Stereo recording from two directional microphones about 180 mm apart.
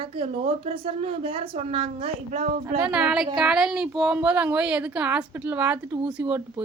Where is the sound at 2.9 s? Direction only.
5° right (ahead or behind).